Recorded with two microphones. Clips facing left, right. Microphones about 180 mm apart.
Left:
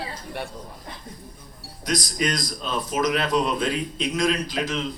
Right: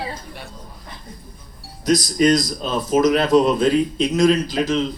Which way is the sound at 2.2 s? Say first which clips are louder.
Right 10 dB; 40° right (ahead or behind).